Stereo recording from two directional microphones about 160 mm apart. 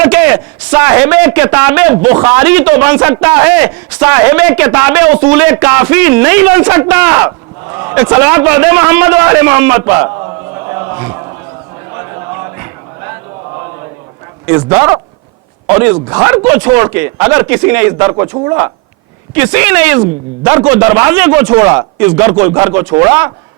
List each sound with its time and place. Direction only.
0.0 s a man's voice: 10° right (ahead or behind)
10.2 s chant: 25° right (ahead or behind)
11.9 s a sound: 20° right (ahead or behind)
14.4 s a man's voice: 10° right (ahead or behind)